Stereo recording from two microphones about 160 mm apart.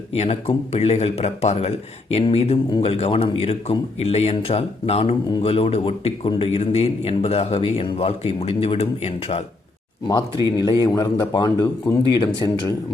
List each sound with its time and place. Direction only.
0.2 s a man's voice: 40° left (ahead or behind)
10.1 s a man's voice: 25° left (ahead or behind)